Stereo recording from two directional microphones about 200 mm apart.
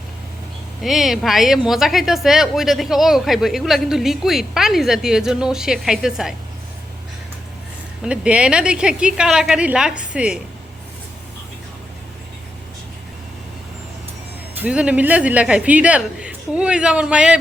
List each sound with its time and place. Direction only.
0.8 s a woman's voice: centre (ahead or behind)
8.0 s a woman's voice: 5° right (ahead or behind)
14.6 s a woman's voice: 5° right (ahead or behind)